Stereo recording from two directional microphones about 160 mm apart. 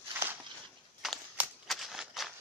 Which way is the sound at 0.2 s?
20° right (ahead or behind).